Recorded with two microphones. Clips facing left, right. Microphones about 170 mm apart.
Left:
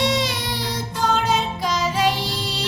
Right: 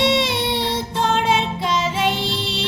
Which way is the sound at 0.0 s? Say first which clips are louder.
Right 3 dB; 25° right (ahead or behind).